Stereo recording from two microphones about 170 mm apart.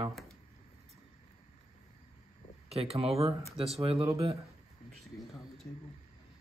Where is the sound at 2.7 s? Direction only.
35° right (ahead or behind).